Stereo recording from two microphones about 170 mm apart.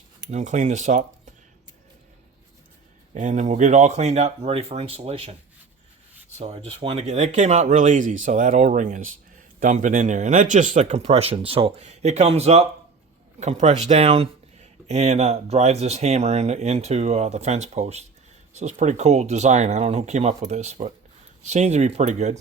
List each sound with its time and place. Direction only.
0.3 s speech: 45° right (ahead or behind)
3.2 s speech: 45° right (ahead or behind)